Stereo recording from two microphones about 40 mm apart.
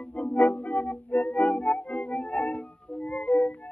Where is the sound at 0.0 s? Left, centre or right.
Left.